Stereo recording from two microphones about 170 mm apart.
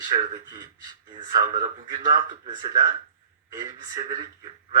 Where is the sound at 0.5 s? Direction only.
25° right (ahead or behind).